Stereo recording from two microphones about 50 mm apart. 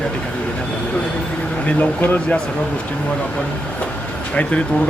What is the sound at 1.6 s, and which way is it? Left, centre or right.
Speech, left.